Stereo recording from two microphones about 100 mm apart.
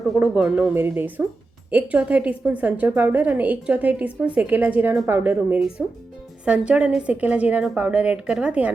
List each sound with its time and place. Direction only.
0.3 s a woman's voice: 5° right (ahead or behind)
0.6 s a woman's voice: 20° right (ahead or behind)
5.5 s a woman's voice: 5° right (ahead or behind)